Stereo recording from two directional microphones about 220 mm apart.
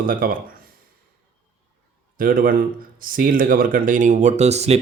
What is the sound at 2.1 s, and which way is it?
Speech, 40° right (ahead or behind).